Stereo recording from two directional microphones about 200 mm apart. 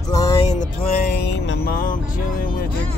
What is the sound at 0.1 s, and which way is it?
Music, 15° left (ahead or behind).